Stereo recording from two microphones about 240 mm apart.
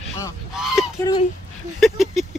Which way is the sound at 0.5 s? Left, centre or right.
Centre.